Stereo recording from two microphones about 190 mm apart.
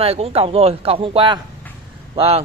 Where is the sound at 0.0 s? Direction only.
30° right (ahead or behind).